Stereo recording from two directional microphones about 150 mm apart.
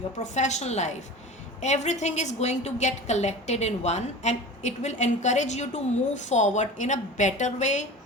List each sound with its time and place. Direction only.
0.2 s a woman's voice: 50° left (ahead or behind)